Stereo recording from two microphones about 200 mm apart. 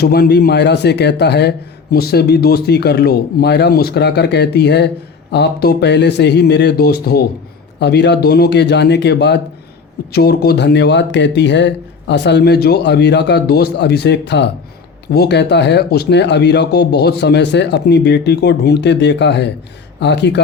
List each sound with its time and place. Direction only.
0.0 s a man's voice: 50° left (ahead or behind)